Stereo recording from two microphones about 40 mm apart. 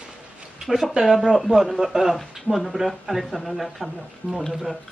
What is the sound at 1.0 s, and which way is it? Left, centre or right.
Speech, right.